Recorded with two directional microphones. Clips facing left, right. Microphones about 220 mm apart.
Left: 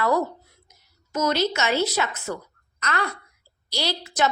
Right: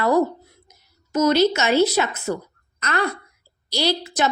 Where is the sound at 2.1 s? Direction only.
25° right (ahead or behind).